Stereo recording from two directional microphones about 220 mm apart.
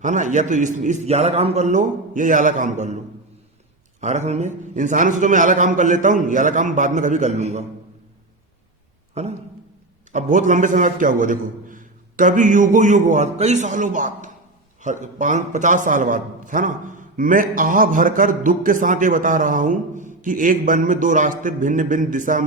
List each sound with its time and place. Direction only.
0.0 s a man's voice: 35° right (ahead or behind)
4.0 s a man's voice: 30° right (ahead or behind)
9.2 s a man's voice: 30° right (ahead or behind)